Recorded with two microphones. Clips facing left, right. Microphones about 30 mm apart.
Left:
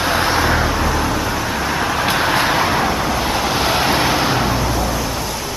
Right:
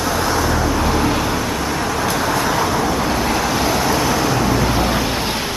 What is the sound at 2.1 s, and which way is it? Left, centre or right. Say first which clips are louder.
Vehicle: left 3 dB; left.